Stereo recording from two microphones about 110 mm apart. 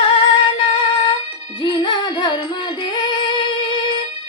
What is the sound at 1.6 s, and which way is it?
Music, 50° left (ahead or behind).